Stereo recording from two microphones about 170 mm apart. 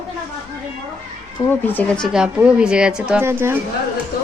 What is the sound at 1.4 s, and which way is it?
Speech, 10° left (ahead or behind).